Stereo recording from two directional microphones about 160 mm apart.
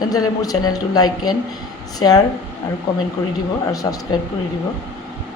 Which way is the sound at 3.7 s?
20° left (ahead or behind).